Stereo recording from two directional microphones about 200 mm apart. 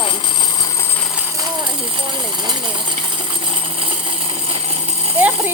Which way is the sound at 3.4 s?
25° right (ahead or behind).